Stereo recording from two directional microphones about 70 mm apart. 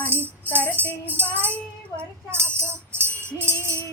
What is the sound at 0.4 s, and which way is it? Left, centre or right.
Music, left.